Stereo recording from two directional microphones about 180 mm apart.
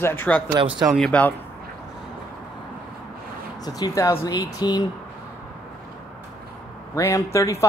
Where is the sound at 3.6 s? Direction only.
20° left (ahead or behind).